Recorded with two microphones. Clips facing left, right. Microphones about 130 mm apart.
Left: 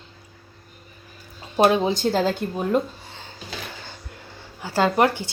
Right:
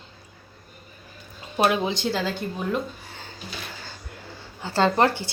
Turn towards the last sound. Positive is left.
turn(degrees=15)  # may be behind; listen again after turning